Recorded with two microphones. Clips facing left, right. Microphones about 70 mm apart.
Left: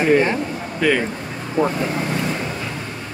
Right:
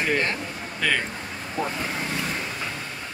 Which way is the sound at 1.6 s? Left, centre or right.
Left.